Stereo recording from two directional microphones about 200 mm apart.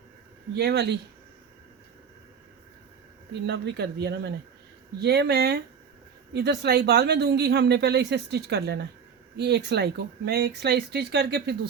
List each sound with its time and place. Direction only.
0.5 s speech: 55° right (ahead or behind)
3.3 s speech: 55° right (ahead or behind)